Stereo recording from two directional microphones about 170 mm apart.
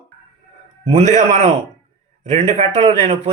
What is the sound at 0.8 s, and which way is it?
A man's voice, 40° right (ahead or behind).